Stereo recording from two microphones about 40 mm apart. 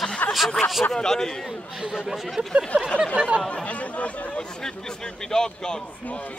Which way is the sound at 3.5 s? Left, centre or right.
Left.